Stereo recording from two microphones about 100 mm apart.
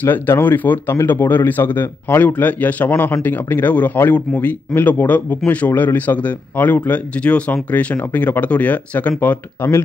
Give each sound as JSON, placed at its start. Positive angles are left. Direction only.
{"t": 0.0, "sound": "speech", "side_deg": 20}